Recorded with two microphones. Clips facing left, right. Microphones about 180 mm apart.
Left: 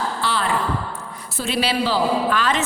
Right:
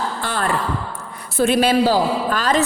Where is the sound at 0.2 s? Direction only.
50° right (ahead or behind).